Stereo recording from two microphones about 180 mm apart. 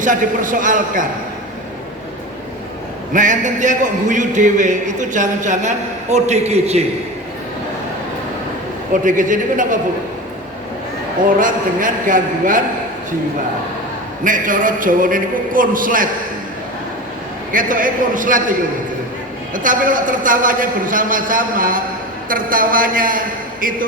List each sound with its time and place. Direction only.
0.0 s a man's voice: 45° right (ahead or behind)
3.1 s a man's voice: 45° right (ahead or behind)
8.9 s a man's voice: 45° right (ahead or behind)
11.3 s a man's voice: 45° right (ahead or behind)
14.3 s a man's voice: 45° right (ahead or behind)
17.5 s a man's voice: 50° right (ahead or behind)
19.5 s a man's voice: 45° right (ahead or behind)